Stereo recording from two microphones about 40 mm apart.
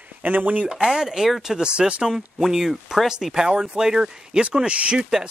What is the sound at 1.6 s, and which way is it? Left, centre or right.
Speech, right.